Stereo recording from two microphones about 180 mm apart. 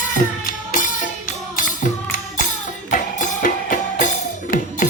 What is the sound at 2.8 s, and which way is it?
Music, 45° left (ahead or behind).